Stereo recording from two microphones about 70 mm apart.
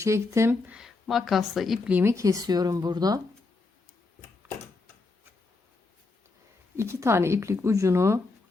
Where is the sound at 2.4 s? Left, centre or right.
Right.